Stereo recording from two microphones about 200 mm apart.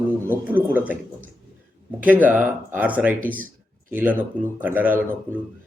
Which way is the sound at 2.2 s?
10° right (ahead or behind).